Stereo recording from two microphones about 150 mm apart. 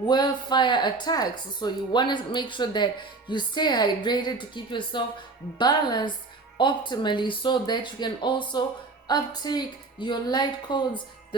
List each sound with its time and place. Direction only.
0.1 s a woman's voice: 30° left (ahead or behind)